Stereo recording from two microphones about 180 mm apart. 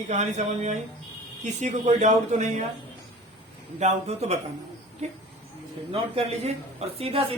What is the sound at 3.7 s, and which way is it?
Speech, 40° right (ahead or behind).